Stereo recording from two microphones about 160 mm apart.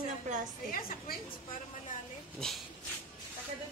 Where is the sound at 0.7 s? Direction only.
70° left (ahead or behind).